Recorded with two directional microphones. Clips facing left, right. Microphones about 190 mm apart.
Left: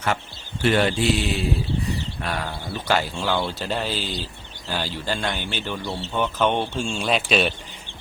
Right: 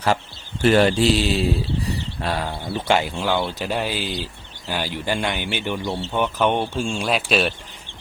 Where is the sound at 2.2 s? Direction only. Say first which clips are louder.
Right 3 dB; 25° right (ahead or behind).